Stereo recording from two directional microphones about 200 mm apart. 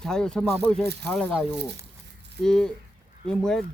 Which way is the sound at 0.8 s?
55° right (ahead or behind).